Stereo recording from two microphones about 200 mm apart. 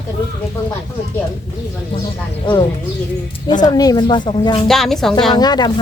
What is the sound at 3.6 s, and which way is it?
Speech, 20° left (ahead or behind).